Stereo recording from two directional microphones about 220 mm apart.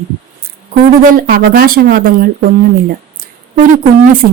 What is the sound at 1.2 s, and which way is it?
Speech, 40° right (ahead or behind).